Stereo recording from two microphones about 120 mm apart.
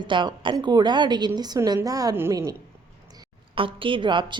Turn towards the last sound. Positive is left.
turn(degrees=-40)  # may be behind; listen again after turning